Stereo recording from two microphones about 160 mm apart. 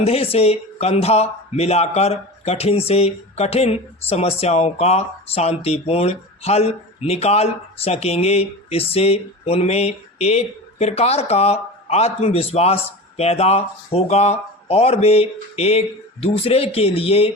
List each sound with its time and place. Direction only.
0.0 s speech: 40° left (ahead or behind)